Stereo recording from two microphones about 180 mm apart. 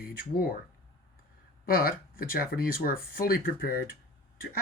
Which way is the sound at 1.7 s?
55° left (ahead or behind).